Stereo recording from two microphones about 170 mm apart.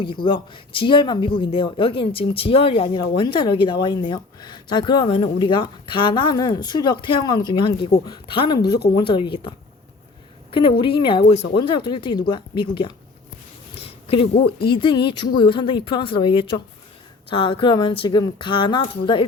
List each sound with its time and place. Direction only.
0.3 s speech: 30° left (ahead or behind)